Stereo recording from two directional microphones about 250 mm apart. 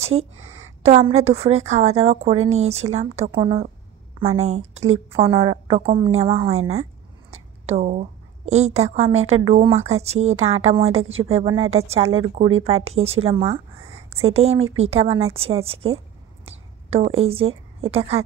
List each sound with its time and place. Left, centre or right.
0.0 s a woman's voice: right
2.3 s speech: right
2.7 s a woman's voice: right
6.7 s a sound: right
9.5 s a woman's voice: right
17.2 s a woman's voice: right